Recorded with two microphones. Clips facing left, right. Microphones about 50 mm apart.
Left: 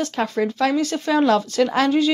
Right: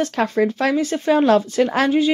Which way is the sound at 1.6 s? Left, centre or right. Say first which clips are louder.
Right 1 dB; right.